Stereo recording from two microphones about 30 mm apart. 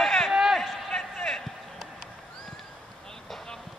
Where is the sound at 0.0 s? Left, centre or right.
Centre.